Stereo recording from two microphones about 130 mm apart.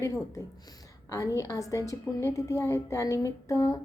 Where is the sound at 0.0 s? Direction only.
25° left (ahead or behind).